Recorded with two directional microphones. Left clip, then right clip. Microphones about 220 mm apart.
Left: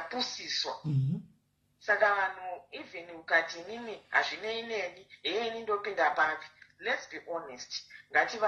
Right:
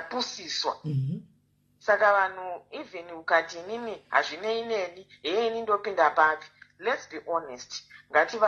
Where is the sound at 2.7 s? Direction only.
45° right (ahead or behind).